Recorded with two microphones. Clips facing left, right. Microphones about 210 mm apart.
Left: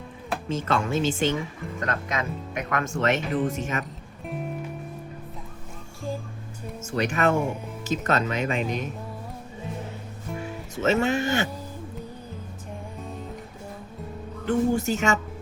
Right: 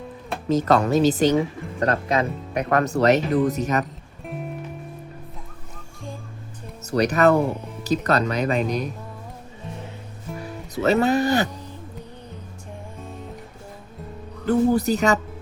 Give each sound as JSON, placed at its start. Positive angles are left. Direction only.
{"t": 0.4, "sound": "speech", "side_deg": -40}
{"t": 6.8, "sound": "speech", "side_deg": -40}
{"t": 10.4, "sound": "speech", "side_deg": -35}
{"t": 14.4, "sound": "music", "side_deg": -40}